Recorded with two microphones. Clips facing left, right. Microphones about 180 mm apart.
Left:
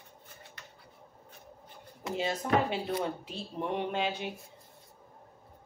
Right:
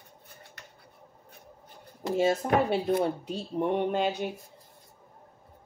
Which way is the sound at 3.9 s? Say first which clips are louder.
Right 5 dB; 45° right (ahead or behind).